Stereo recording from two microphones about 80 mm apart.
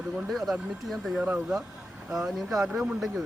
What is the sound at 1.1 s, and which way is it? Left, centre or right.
Speech, centre.